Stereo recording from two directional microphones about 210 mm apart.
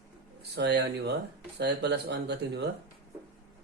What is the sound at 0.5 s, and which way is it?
Speech, 55° right (ahead or behind).